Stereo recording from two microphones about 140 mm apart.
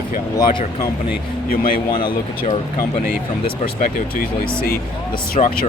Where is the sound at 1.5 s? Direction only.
90° left.